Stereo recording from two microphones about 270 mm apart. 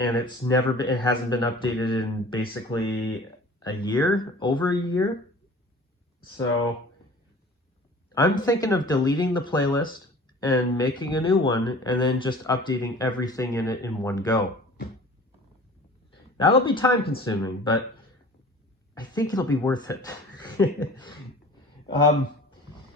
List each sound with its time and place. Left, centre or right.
0.0 s speech: centre
8.1 s speech: centre
16.4 s speech: centre
18.9 s speech: centre